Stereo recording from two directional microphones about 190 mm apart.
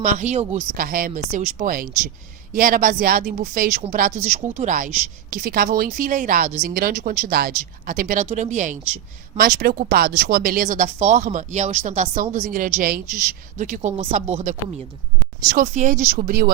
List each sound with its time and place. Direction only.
0.0 s speech: 40° right (ahead or behind)
0.8 s speech: 50° right (ahead or behind)
9.4 s speech: 55° right (ahead or behind)